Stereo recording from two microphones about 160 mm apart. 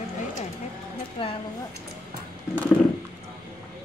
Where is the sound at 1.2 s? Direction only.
30° left (ahead or behind).